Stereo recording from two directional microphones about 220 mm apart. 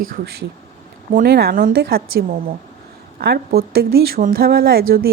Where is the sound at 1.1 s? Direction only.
45° right (ahead or behind).